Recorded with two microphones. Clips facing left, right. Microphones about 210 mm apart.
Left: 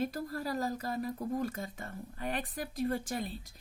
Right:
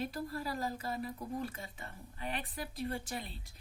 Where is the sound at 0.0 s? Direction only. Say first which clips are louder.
Left 3 dB; 45° left (ahead or behind).